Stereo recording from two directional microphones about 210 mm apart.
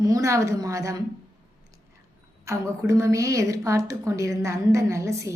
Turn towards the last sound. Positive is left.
turn(degrees=-15)  # may be behind; listen again after turning